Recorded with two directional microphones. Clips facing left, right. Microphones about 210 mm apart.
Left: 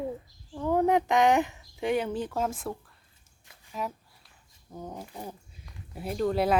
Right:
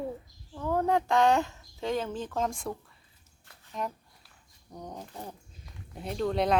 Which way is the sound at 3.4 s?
5° left (ahead or behind).